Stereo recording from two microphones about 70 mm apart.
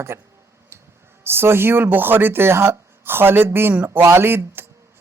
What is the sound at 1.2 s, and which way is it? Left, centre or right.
Speech, right.